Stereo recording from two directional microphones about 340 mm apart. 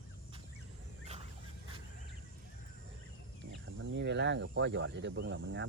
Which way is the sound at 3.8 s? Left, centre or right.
Right.